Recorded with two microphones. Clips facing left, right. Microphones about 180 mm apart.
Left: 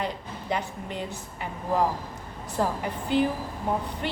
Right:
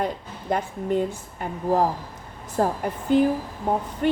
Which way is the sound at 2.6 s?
45° right (ahead or behind).